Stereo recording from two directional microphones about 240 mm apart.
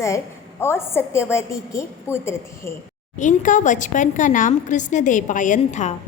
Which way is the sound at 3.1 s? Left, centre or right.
Left.